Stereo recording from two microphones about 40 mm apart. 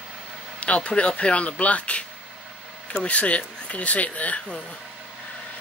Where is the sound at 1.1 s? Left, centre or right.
Left.